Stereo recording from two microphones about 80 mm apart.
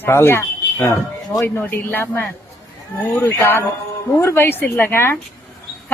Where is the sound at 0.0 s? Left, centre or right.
Left.